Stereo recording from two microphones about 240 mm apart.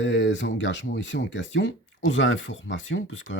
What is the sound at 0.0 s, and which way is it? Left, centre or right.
Speech, left.